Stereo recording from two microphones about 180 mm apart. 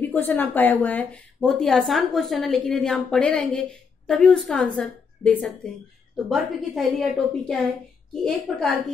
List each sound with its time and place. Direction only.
0.0 s a woman's voice: 10° left (ahead or behind)